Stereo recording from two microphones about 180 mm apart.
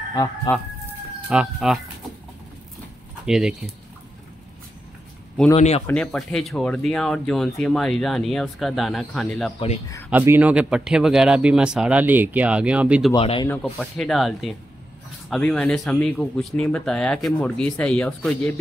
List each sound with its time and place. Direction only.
0.1 s speech: 20° left (ahead or behind)
1.3 s speech: 5° right (ahead or behind)
3.3 s speech: 5° right (ahead or behind)
5.6 s speech: 35° left (ahead or behind)
5.9 s speech: 5° left (ahead or behind)
10.0 s speech: 10° right (ahead or behind)
13.1 s speech: 25° left (ahead or behind)
13.5 s speech: 5° left (ahead or behind)